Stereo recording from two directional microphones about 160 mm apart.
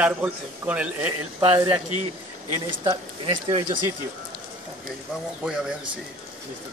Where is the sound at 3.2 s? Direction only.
35° right (ahead or behind).